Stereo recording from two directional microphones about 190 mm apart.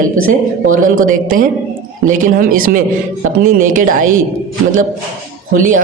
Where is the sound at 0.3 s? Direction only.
45° right (ahead or behind).